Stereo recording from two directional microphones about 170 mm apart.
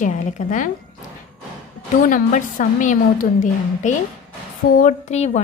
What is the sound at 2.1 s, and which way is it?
A woman's voice, 50° left (ahead or behind).